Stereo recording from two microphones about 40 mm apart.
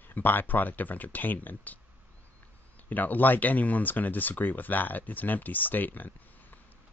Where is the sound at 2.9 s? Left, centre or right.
Left.